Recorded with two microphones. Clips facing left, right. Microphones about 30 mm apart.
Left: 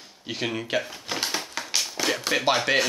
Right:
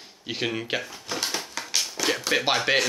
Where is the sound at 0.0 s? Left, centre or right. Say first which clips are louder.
Right 1 dB; centre.